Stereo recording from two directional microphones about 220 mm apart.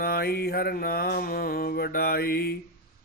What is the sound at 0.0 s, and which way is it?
Mantra, 45° left (ahead or behind).